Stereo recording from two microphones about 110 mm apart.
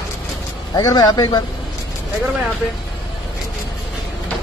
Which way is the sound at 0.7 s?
35° left (ahead or behind).